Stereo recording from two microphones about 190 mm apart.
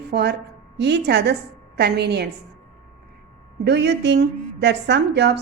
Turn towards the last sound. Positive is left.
turn(degrees=-65)  # may be behind; listen again after turning